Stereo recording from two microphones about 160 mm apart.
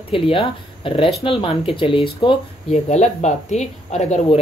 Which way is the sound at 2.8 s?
45° left (ahead or behind).